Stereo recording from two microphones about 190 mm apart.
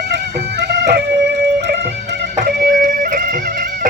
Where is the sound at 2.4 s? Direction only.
45° right (ahead or behind).